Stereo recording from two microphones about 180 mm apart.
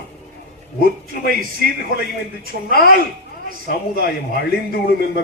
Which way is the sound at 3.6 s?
65° left (ahead or behind).